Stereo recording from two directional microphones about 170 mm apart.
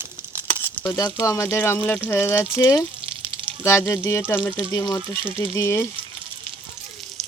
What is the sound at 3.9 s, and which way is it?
Speech, 15° left (ahead or behind).